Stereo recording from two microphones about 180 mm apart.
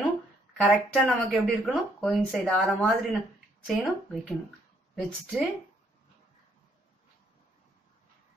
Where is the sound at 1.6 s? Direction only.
Centre (ahead or behind).